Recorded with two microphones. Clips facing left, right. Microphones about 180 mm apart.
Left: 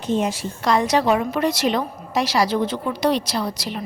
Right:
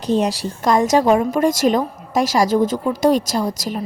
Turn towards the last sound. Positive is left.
turn(degrees=-45)  # may be behind; listen again after turning